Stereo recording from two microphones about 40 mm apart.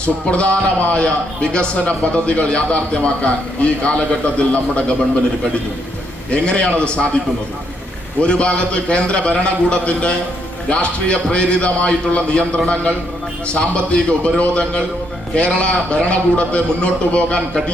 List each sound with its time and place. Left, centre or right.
0.0 s a man's voice: left
6.3 s a man's voice: left
8.2 s a man's voice: left